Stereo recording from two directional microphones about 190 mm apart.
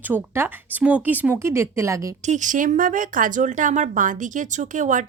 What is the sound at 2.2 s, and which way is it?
Speech, 40° right (ahead or behind).